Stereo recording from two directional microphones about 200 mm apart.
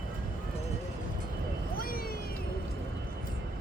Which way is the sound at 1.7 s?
45° left (ahead or behind).